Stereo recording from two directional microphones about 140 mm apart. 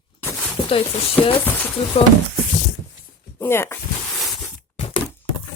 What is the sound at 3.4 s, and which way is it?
Speech, 15° left (ahead or behind).